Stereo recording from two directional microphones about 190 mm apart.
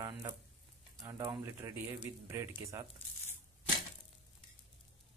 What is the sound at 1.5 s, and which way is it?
Speech, 10° right (ahead or behind).